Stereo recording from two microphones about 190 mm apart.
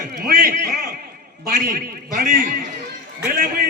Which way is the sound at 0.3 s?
45° right (ahead or behind).